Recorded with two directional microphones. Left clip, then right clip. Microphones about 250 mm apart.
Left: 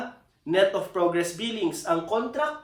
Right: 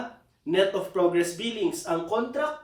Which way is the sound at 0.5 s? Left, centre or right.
Centre.